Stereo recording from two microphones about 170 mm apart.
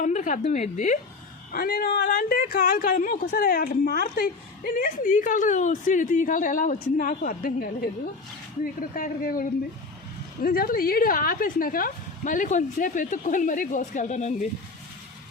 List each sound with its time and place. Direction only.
0.0 s a woman's voice: 50° left (ahead or behind)
1.5 s a woman's voice: 60° left (ahead or behind); by 14.3 s 45° left (ahead or behind)